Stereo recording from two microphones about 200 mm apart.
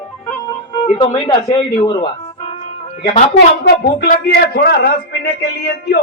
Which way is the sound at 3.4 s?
50° left (ahead or behind).